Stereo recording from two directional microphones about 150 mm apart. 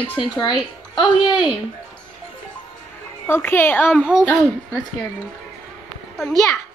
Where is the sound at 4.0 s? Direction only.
5° right (ahead or behind).